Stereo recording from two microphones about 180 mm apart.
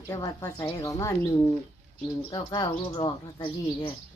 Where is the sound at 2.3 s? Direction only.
25° left (ahead or behind).